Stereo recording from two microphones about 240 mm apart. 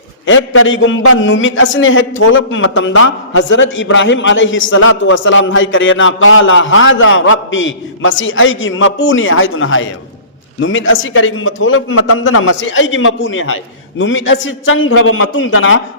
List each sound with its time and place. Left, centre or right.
0.3 s a man's voice: left